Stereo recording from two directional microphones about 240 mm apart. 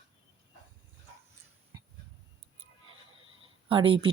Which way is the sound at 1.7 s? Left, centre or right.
Centre.